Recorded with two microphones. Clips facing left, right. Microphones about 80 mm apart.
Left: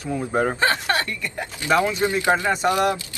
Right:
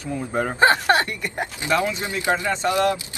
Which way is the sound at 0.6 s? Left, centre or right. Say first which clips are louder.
Right 4 dB; right.